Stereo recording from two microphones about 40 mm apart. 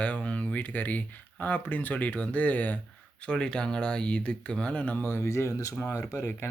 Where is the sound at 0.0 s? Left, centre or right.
Left.